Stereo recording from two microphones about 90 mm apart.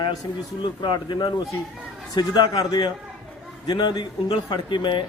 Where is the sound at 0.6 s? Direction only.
60° left (ahead or behind).